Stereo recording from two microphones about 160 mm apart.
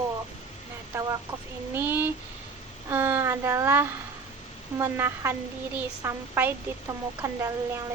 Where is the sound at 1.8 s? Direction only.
15° right (ahead or behind).